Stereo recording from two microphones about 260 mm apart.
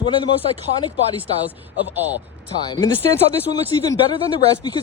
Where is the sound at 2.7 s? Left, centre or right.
Centre.